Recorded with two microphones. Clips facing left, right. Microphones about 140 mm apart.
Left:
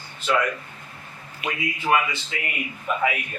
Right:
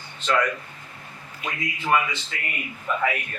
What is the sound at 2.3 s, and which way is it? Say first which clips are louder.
Speech: left 3 dB; 5° left (ahead or behind).